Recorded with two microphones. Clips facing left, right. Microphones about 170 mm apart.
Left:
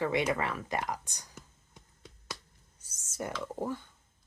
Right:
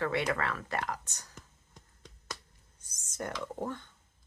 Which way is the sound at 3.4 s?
10° left (ahead or behind).